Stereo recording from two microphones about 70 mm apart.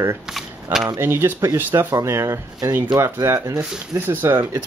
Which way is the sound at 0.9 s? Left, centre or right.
Right.